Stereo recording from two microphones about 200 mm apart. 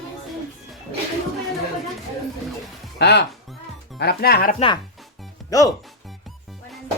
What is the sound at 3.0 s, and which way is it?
Speech, 55° left (ahead or behind).